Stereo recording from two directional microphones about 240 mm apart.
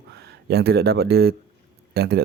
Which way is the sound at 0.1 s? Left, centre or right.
Right.